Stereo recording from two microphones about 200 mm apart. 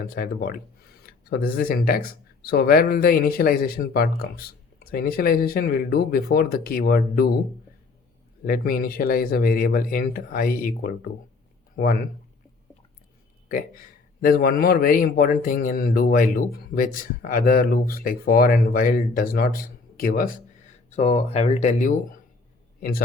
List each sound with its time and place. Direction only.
0.0 s speech: 45° left (ahead or behind)
8.4 s speech: 45° left (ahead or behind)
14.2 s speech: 50° left (ahead or behind)
20.9 s speech: 35° left (ahead or behind)